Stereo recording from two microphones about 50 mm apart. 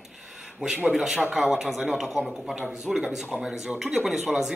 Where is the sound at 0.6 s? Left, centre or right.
Centre.